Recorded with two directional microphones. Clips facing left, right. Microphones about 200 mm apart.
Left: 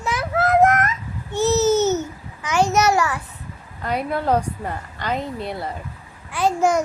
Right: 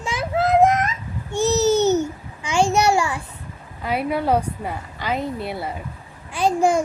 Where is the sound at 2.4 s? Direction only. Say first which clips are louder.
Even; 30° right (ahead or behind).